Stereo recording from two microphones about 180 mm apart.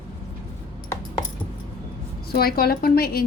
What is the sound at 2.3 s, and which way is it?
Speech, 60° left (ahead or behind).